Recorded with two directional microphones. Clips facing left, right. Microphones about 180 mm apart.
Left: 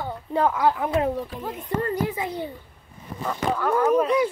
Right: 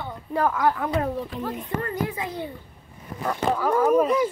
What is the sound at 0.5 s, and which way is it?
Speech, 15° left (ahead or behind).